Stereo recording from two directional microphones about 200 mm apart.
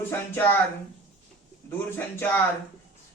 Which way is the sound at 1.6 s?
10° left (ahead or behind).